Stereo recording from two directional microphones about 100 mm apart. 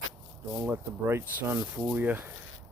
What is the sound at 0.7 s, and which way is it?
Speech, 25° right (ahead or behind).